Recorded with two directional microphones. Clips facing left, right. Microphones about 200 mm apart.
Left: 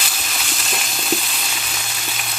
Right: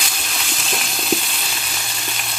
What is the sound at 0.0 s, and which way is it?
Frying, centre (ahead or behind).